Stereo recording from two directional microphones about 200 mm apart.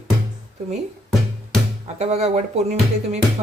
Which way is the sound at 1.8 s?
35° right (ahead or behind).